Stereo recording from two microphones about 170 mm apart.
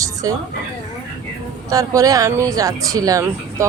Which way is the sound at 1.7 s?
20° right (ahead or behind).